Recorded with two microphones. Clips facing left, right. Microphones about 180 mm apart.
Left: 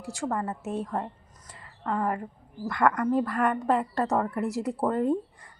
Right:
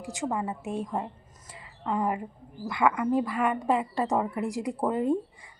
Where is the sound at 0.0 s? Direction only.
15° right (ahead or behind).